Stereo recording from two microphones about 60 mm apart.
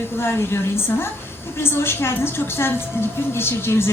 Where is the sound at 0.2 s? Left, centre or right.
Left.